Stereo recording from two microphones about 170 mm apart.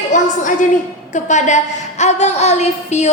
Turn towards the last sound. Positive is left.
turn(degrees=40)  # may be behind; listen again after turning